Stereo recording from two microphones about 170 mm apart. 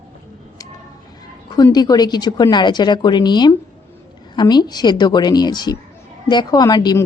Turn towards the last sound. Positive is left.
turn(degrees=25)  # may be behind; listen again after turning